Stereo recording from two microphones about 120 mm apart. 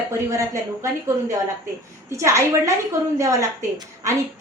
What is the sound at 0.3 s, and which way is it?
Speech, 25° right (ahead or behind).